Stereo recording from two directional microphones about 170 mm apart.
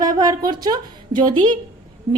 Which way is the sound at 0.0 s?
25° right (ahead or behind).